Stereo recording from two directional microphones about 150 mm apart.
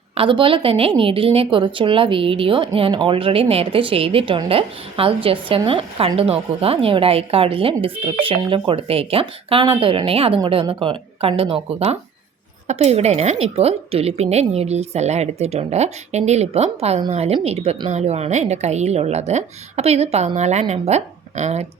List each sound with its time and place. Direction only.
0.1 s a woman's voice: 35° right (ahead or behind)